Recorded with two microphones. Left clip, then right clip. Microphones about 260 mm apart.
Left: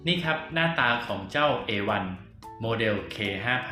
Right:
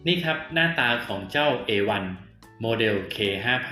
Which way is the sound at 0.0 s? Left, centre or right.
Centre.